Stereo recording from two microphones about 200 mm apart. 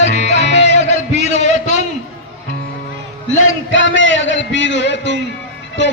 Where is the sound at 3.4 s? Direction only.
80° left.